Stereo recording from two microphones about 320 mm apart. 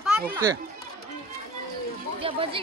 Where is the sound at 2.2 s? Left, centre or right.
Centre.